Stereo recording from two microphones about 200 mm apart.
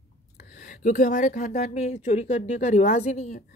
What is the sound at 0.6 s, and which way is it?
Speech, 35° left (ahead or behind).